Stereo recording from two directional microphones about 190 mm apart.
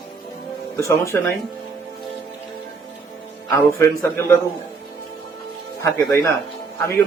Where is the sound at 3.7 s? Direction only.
15° left (ahead or behind).